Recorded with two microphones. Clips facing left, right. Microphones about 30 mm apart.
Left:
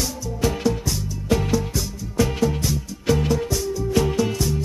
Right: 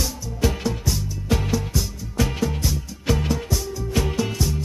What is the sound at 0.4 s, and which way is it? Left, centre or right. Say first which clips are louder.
Music: left 2 dB; centre.